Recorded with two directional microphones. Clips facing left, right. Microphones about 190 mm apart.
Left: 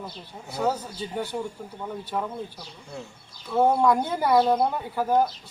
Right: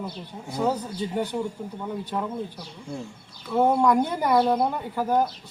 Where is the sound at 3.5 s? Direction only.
5° left (ahead or behind).